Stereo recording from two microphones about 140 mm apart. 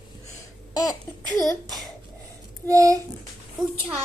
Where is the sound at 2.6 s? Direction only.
25° right (ahead or behind).